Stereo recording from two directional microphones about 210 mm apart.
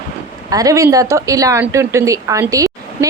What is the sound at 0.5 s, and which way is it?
A woman's voice, 15° right (ahead or behind).